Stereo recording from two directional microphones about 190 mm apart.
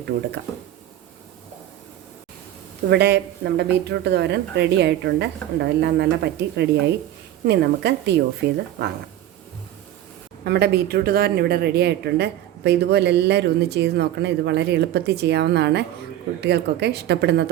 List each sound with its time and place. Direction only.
2.9 s speech: 60° right (ahead or behind)
10.4 s speech: 60° right (ahead or behind)